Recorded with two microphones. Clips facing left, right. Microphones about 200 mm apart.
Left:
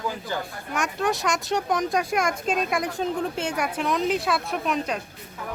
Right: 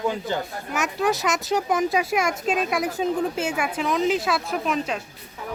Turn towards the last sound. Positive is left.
turn(degrees=0)  # may be behind; listen again after turning